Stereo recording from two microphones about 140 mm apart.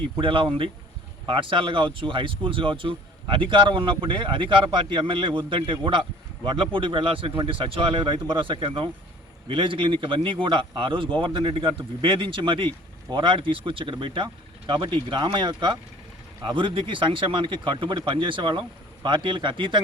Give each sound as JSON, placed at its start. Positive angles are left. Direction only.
{"t": 0.2, "sound": "speech", "side_deg": -35}